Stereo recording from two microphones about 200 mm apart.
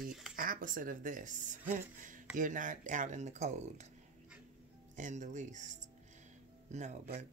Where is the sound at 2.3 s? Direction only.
40° right (ahead or behind).